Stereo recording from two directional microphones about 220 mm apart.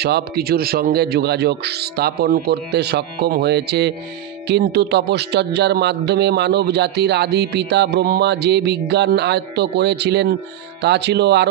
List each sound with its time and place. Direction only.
0.0 s a man's voice: 45° right (ahead or behind)